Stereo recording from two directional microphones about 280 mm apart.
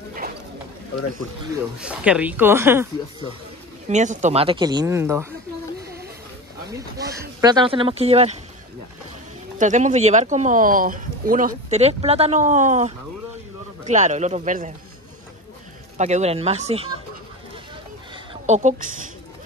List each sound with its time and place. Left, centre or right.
1.5 s speech: centre
3.9 s speech: right; by 5.3 s centre
6.7 s speech: centre
9.6 s speech: right
16.0 s speech: right
18.3 s a woman's voice: right